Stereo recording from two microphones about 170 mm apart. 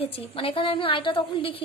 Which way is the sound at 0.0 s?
35° left (ahead or behind).